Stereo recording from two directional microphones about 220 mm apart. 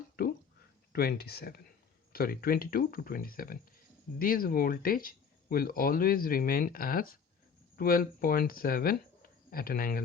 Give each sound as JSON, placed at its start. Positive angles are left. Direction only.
{"t": 0.9, "sound": "speech", "side_deg": 45}